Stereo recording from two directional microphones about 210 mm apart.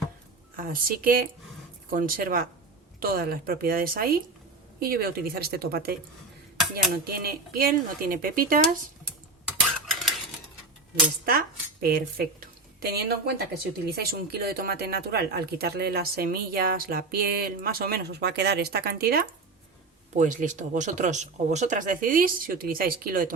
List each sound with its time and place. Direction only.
0.5 s a woman's voice: 45° right (ahead or behind)
9.6 s stir: centre (ahead or behind)
11.3 s a woman's voice: 45° right (ahead or behind)
20.1 s speech: 35° right (ahead or behind)